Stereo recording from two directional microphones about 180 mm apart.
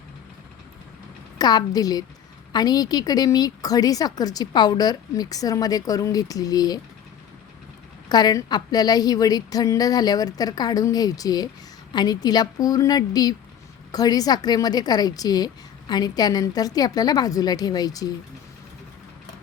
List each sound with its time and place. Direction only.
1.4 s a woman's voice: 20° left (ahead or behind)
8.1 s a woman's voice: 20° left (ahead or behind)